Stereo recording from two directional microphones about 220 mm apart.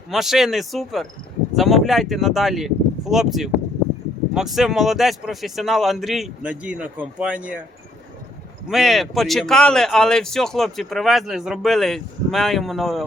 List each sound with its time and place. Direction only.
0.1 s speech: centre (ahead or behind)
8.7 s speech: centre (ahead or behind)